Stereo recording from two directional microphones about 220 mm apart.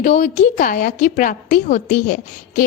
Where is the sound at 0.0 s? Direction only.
35° left (ahead or behind).